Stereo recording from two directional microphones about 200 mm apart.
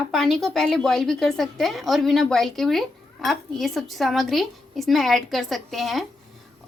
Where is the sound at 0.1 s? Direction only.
Centre (ahead or behind).